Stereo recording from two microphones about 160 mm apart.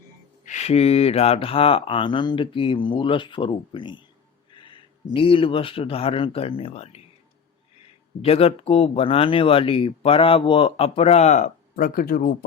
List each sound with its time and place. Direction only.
0.4 s speech: 45° left (ahead or behind)
8.2 s speech: 40° left (ahead or behind); by 12.5 s 65° left (ahead or behind)